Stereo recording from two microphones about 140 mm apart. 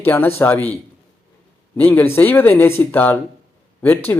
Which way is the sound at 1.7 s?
15° left (ahead or behind).